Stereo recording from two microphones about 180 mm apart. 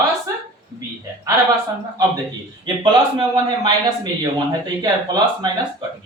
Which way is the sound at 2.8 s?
25° right (ahead or behind).